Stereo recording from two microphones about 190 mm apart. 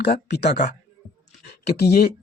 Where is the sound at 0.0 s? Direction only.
60° left (ahead or behind).